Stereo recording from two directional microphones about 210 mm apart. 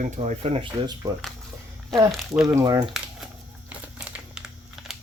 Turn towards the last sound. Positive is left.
turn(degrees=0)  # may be behind; listen again after turning